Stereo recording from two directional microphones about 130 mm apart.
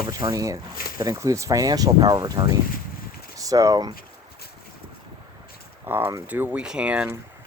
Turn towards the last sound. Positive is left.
turn(degrees=-10)  # may be behind; listen again after turning